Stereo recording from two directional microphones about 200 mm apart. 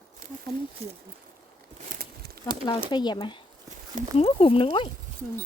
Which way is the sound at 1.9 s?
50° right (ahead or behind).